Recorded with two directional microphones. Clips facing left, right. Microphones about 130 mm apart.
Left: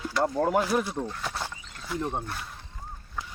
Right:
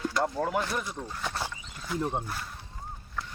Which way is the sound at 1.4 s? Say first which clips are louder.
Even; 5° right (ahead or behind).